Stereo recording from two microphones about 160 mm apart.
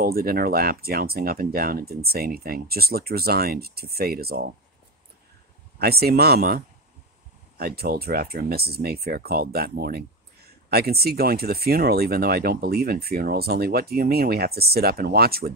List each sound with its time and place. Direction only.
0.0 s speech: 70° right (ahead or behind)
5.8 s speech: 75° right (ahead or behind)